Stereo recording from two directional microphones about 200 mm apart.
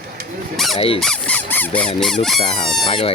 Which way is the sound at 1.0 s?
5° left (ahead or behind).